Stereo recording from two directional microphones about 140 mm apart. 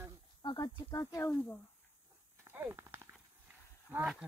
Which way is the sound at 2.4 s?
15° right (ahead or behind).